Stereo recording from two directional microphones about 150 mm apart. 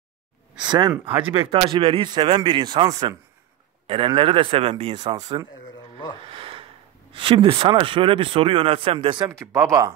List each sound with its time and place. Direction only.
0.6 s speech: 25° right (ahead or behind)
5.5 s a sound: 30° left (ahead or behind)
6.3 s speech: 35° right (ahead or behind)
9.4 s speech: 20° right (ahead or behind)